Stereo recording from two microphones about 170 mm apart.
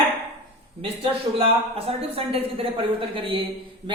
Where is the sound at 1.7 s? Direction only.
35° right (ahead or behind).